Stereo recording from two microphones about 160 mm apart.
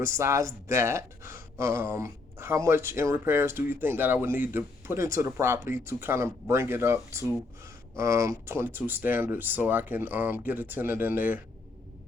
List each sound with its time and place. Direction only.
0.2 s speech: 20° right (ahead or behind)